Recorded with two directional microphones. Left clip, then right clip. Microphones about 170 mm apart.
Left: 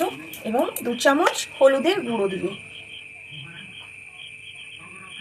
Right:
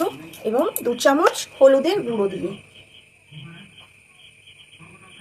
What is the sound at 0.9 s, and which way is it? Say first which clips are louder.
Speech: right 2 dB; 25° right (ahead or behind).